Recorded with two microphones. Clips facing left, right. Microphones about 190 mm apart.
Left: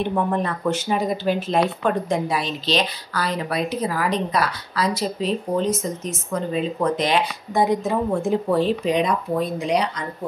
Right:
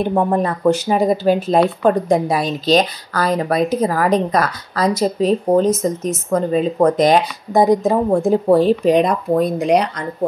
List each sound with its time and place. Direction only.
0.0 s speech: 45° right (ahead or behind)